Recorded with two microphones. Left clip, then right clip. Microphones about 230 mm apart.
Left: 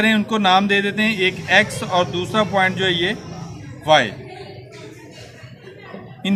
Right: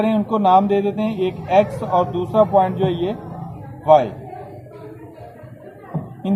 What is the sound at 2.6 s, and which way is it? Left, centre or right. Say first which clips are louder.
Music: left 2 dB; centre.